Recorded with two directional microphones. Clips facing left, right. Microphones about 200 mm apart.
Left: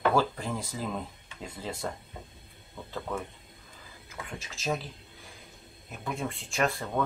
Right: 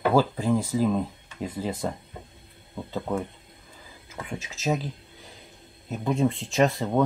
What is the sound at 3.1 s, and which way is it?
Speech, 20° right (ahead or behind).